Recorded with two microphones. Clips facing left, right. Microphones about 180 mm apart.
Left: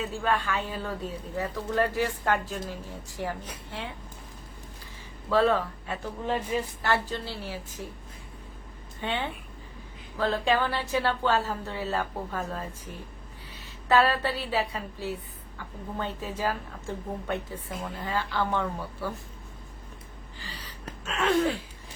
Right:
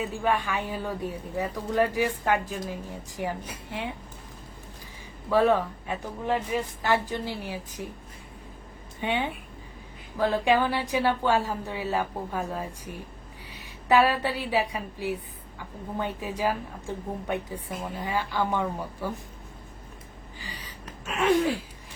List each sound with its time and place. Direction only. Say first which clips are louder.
0.0 s a woman's voice: right 1 dB; 15° right (ahead or behind)
5.3 s a woman's voice: right 2 dB; 15° right (ahead or behind)
9.0 s a woman's voice: right 3 dB; 15° right (ahead or behind)
21.0 s a woman's voice: right 2 dB; 15° right (ahead or behind)